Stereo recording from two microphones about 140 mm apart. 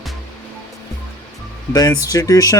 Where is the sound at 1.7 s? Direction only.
25° left (ahead or behind).